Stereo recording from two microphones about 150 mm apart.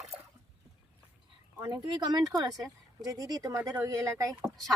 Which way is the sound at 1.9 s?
30° right (ahead or behind).